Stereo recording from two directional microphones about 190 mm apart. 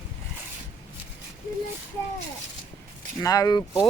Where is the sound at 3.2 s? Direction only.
20° left (ahead or behind).